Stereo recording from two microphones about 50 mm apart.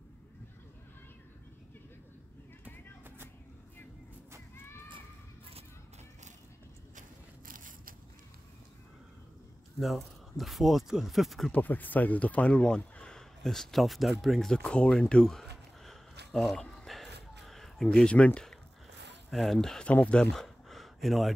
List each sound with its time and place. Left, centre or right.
9.8 s speech: centre
11.5 s speech: left; by 14.5 s centre
14.6 s a sound: left
15.0 s speech: centre
15.3 s a sound: centre
18.0 s speech: left
19.3 s speech: centre
19.9 s speech: left
20.2 s a sound: centre